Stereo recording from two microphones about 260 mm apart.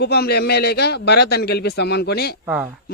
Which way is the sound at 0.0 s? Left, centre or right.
Left.